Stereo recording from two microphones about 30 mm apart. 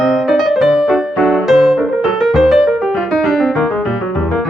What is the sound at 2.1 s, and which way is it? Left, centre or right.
Music, centre.